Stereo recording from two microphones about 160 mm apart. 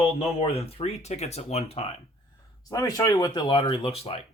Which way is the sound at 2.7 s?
20° left (ahead or behind).